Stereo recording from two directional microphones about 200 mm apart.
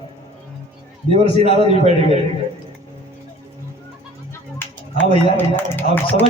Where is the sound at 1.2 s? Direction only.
25° left (ahead or behind).